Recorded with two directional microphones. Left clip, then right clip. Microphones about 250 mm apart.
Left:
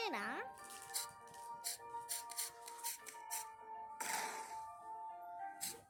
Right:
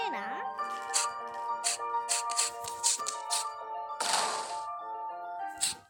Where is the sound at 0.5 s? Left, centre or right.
Right.